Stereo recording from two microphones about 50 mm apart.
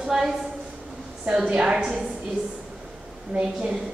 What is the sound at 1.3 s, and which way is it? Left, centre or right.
Speech, centre.